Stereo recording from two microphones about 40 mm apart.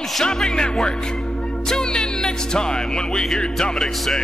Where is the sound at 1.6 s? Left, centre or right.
Centre.